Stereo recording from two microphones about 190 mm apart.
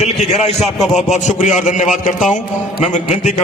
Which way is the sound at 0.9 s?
40° left (ahead or behind).